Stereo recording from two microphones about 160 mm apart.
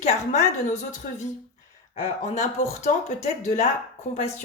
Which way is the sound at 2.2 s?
45° left (ahead or behind).